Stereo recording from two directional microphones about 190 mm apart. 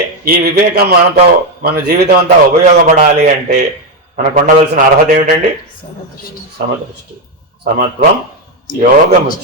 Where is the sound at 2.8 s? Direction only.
40° right (ahead or behind).